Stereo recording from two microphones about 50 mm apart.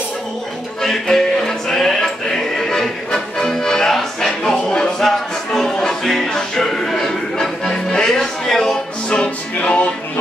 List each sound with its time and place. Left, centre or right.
0.8 s music: centre
9.1 s music: centre